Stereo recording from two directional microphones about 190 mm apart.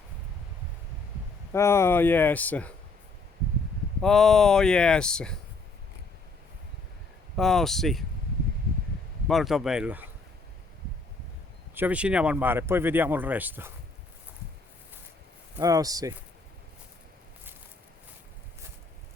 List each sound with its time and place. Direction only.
1.5 s speech: 15° left (ahead or behind)
4.0 s speech: centre (ahead or behind)
7.3 s speech: centre (ahead or behind)
9.2 s speech: centre (ahead or behind)
11.7 s speech: 10° right (ahead or behind)
15.5 s speech: 20° right (ahead or behind)